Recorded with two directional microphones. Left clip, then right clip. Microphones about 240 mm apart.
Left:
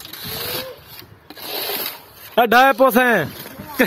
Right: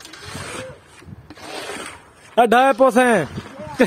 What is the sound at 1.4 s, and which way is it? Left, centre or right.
Rub, left.